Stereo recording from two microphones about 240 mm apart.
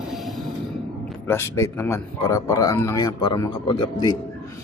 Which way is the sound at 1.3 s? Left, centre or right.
Centre.